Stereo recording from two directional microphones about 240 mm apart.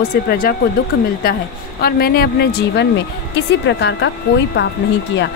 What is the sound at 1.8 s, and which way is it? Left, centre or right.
Speech, left.